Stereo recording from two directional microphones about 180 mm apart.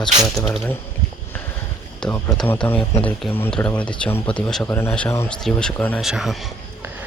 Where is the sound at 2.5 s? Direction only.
10° left (ahead or behind).